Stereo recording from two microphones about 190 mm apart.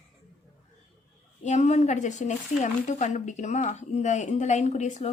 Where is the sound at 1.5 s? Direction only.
35° left (ahead or behind).